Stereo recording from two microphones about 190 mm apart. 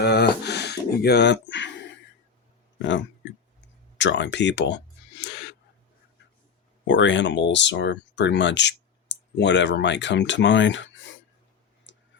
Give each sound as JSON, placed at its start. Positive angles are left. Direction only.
{"t": 0.0, "sound": "speech", "side_deg": 60}
{"t": 6.8, "sound": "speech", "side_deg": 75}
{"t": 11.9, "sound": "a sound", "side_deg": 75}